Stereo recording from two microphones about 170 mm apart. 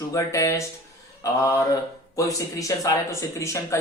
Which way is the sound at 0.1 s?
20° left (ahead or behind).